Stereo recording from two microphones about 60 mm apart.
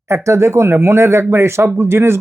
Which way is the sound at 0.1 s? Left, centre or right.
Right.